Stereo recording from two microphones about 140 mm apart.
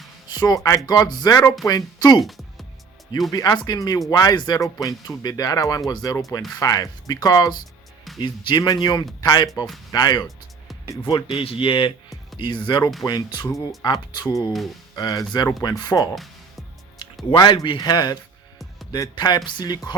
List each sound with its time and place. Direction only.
0.3 s speech: 30° left (ahead or behind)
3.3 s a man's voice: 30° left (ahead or behind)
16.1 s music: centre (ahead or behind)
17.3 s speech: 30° left (ahead or behind)